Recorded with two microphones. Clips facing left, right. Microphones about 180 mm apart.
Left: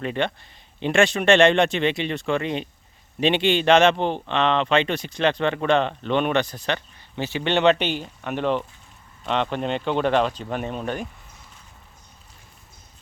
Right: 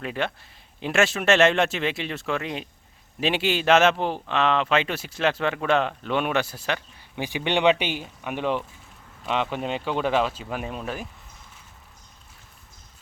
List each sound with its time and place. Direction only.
0.0 s speech: 5° right (ahead or behind)